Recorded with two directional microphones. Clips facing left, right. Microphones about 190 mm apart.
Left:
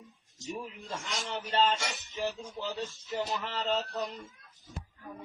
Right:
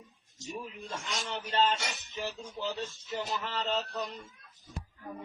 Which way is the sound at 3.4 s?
25° left (ahead or behind).